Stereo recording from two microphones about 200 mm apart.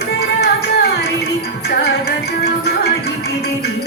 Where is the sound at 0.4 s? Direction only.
55° left (ahead or behind).